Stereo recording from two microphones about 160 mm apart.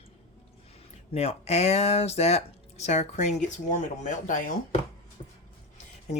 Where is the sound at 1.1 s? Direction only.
40° left (ahead or behind).